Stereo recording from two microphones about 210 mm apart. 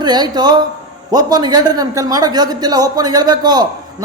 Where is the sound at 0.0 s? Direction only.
20° right (ahead or behind).